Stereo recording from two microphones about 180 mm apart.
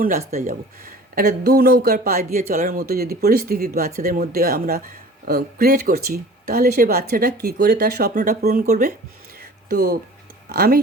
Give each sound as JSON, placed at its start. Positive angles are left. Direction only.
{"t": 0.0, "sound": "speech", "side_deg": -45}
{"t": 1.1, "sound": "speech", "side_deg": -60}
{"t": 9.4, "sound": "music", "side_deg": -60}
{"t": 10.5, "sound": "speech", "side_deg": -60}